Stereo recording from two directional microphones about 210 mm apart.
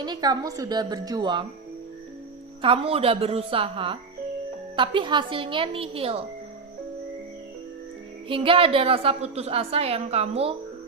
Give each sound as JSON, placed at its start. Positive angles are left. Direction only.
{"t": 0.0, "sound": "a woman's voice", "side_deg": -20}
{"t": 2.6, "sound": "a woman's voice", "side_deg": -25}
{"t": 8.3, "sound": "a woman's voice", "side_deg": -25}